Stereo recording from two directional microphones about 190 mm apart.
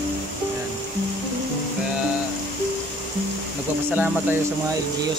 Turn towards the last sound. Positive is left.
turn(degrees=-10)  # may be behind; listen again after turning